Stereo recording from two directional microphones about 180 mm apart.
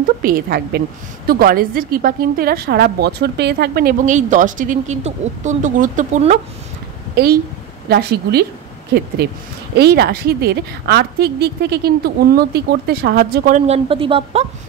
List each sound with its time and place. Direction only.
0.2 s a woman's voice: 55° right (ahead or behind)
7.9 s a woman's voice: 65° right (ahead or behind)
9.8 s a woman's voice: 65° right (ahead or behind)
13.7 s speech: 30° right (ahead or behind)